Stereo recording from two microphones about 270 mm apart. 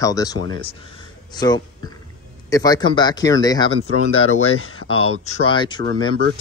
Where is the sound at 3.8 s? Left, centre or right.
Left.